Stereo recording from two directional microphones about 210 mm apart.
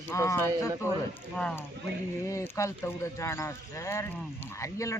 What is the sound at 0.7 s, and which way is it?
Speech, 10° right (ahead or behind).